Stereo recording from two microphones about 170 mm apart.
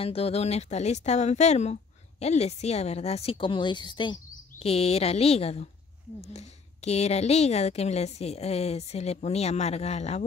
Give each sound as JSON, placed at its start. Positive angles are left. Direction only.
{"t": 0.0, "sound": "speech", "side_deg": 35}